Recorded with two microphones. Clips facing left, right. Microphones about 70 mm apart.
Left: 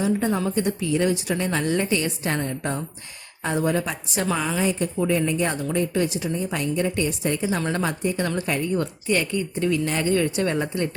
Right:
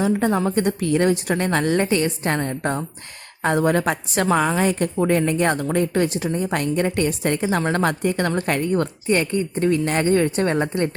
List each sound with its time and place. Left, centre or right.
0.0 s a woman's voice: right
0.5 s a woman's voice: right
3.4 s a woman's voice: right
9.0 s a woman's voice: right